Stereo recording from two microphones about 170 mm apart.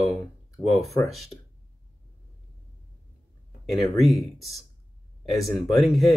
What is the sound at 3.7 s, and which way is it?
Speech, centre (ahead or behind).